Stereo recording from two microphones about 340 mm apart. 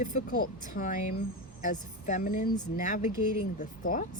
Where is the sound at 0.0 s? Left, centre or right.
Left.